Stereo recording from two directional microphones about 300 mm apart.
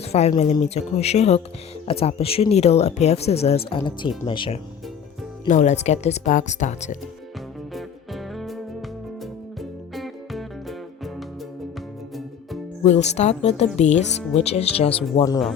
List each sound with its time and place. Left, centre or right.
0.0 s speech: left
7.7 s music: centre
12.8 s speech: left